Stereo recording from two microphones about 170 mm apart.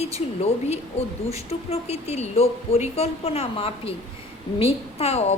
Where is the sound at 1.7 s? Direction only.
40° left (ahead or behind).